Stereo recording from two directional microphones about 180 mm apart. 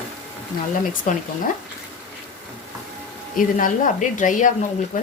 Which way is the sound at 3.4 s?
50° left (ahead or behind).